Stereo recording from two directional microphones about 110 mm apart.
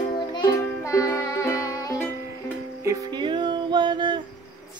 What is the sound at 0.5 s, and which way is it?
Music, 30° left (ahead or behind).